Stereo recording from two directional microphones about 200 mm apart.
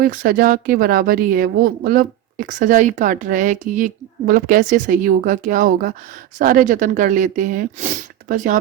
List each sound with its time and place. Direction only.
0.0 s speech: 45° right (ahead or behind)